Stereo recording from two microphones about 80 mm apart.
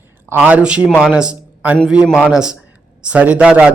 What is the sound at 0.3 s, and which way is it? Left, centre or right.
A man's voice, centre.